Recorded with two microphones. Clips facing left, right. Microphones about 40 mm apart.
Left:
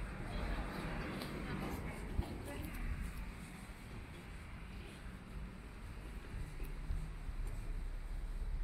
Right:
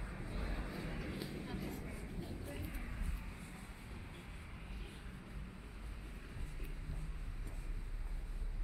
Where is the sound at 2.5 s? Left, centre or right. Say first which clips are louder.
Even; centre.